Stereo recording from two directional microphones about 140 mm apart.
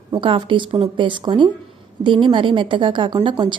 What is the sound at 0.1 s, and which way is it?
A woman's voice, 35° right (ahead or behind).